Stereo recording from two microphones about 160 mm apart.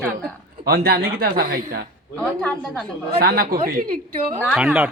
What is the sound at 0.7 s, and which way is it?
A man's voice, 75° right (ahead or behind).